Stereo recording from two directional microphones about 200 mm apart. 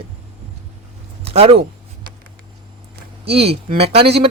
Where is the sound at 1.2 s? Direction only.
30° right (ahead or behind).